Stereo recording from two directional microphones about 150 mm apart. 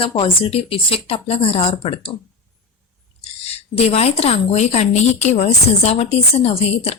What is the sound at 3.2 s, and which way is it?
A woman's voice, 45° left (ahead or behind).